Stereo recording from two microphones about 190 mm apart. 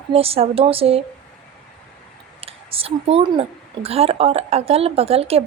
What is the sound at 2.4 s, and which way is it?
Speech, 30° right (ahead or behind).